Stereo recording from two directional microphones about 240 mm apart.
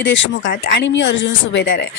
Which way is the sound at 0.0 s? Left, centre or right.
Left.